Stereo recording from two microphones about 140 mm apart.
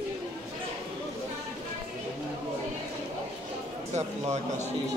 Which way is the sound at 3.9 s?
50° right (ahead or behind).